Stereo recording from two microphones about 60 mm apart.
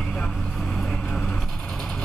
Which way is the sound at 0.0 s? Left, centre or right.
Centre.